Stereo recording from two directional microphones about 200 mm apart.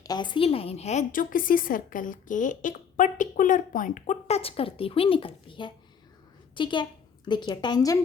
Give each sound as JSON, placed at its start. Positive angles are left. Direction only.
{"t": 0.0, "sound": "a woman's voice", "side_deg": 20}